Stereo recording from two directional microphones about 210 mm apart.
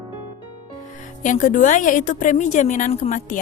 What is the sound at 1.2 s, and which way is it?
A woman's voice, 40° left (ahead or behind).